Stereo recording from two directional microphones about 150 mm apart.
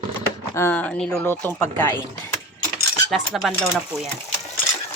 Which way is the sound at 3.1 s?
Centre (ahead or behind).